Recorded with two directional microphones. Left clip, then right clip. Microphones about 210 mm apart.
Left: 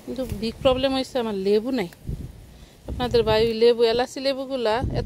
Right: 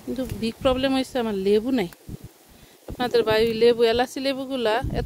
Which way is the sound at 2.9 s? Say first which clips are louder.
Even; 25° right (ahead or behind).